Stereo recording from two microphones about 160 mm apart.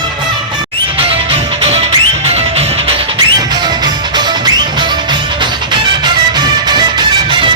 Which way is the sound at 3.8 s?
25° right (ahead or behind).